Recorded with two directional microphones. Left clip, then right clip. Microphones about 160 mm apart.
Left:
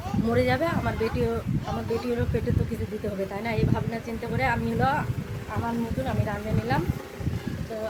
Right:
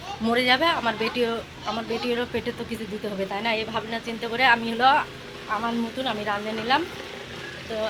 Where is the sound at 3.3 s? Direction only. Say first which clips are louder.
Right 3 dB; centre (ahead or behind).